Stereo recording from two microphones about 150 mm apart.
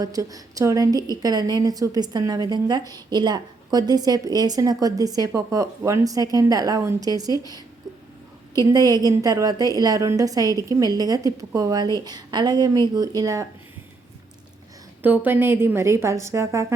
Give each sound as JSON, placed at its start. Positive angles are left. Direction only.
{"t": 0.0, "sound": "a woman's voice", "side_deg": -25}
{"t": 8.7, "sound": "a woman's voice", "side_deg": -25}
{"t": 15.0, "sound": "a woman's voice", "side_deg": -10}